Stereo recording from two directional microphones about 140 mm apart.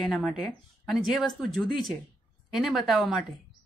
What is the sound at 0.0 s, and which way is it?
A woman's voice, centre (ahead or behind).